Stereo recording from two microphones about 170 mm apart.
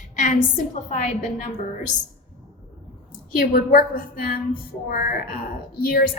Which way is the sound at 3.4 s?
55° left (ahead or behind).